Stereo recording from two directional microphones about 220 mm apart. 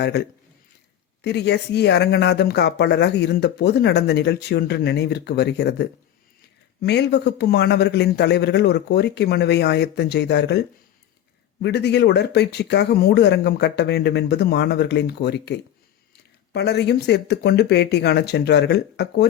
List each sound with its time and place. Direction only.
0.0 s speech: 50° left (ahead or behind)
11.6 s speech: 50° left (ahead or behind)